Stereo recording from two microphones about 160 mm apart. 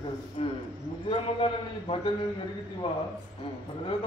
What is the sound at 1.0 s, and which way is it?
Speech, 35° left (ahead or behind).